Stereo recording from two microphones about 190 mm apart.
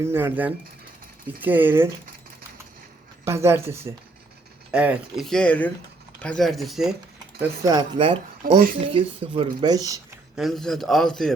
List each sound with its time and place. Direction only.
0.0 s speech: 10° right (ahead or behind)
3.2 s speech: 15° right (ahead or behind)
7.6 s speech: 20° right (ahead or behind)
10.3 s speech: centre (ahead or behind)